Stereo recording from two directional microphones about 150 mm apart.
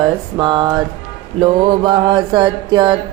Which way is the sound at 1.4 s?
30° right (ahead or behind).